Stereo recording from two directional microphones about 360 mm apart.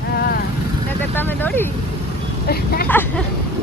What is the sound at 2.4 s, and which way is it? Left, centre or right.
Speech, left.